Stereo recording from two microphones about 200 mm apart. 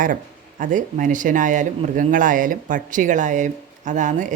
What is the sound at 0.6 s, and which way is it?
Speech, 40° right (ahead or behind).